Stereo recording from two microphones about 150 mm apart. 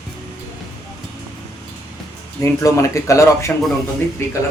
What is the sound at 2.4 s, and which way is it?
Speech, 20° left (ahead or behind).